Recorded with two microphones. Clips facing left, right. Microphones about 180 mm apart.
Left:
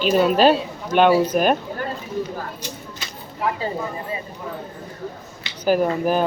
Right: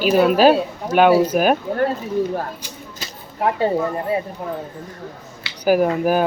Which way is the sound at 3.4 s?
65° right (ahead or behind).